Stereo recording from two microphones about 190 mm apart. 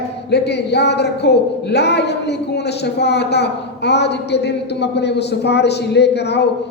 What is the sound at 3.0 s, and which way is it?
A woman's voice, 60° left (ahead or behind).